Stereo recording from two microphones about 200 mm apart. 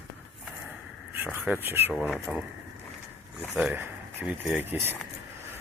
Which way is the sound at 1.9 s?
Centre (ahead or behind).